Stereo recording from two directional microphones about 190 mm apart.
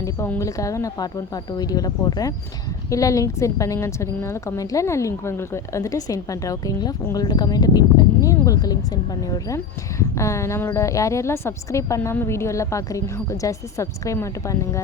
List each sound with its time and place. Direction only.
0.0 s a woman's voice: 15° left (ahead or behind)